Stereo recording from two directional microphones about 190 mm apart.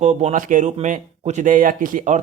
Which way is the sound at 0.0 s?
35° right (ahead or behind).